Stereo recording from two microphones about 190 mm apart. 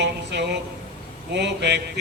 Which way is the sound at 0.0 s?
65° right (ahead or behind).